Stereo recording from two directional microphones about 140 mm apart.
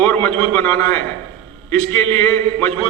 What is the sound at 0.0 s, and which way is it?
A man's voice, 10° left (ahead or behind).